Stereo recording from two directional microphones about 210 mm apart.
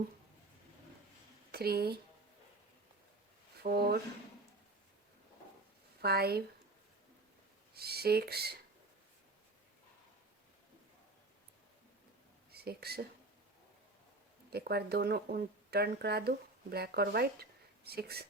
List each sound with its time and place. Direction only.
1.5 s speech: 50° right (ahead or behind)
3.6 s speech: 50° right (ahead or behind)
6.0 s speech: 50° right (ahead or behind)
7.7 s speech: 50° right (ahead or behind)
12.5 s a sound: 50° right (ahead or behind)
14.5 s speech: 50° right (ahead or behind)